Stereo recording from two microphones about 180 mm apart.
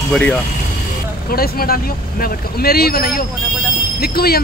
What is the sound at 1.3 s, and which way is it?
Speech, 55° left (ahead or behind).